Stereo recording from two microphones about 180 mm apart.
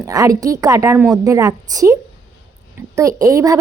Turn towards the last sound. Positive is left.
turn(degrees=-20)  # may be behind; listen again after turning